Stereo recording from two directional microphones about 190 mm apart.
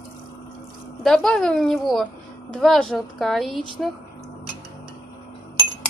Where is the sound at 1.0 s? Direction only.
Centre (ahead or behind).